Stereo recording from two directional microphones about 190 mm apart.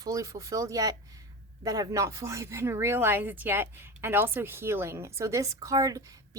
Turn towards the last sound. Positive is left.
turn(degrees=-15)  # may be behind; listen again after turning